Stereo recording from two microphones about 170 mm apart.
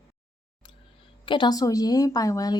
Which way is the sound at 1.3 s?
25° left (ahead or behind).